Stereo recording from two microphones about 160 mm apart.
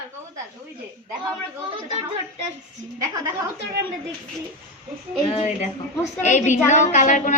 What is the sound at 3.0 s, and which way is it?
Speech, 20° right (ahead or behind).